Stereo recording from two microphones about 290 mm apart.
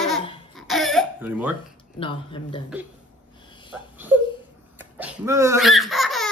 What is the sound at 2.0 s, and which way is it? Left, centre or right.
Speech, centre.